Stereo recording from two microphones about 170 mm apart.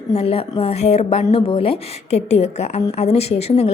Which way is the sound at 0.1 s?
35° left (ahead or behind).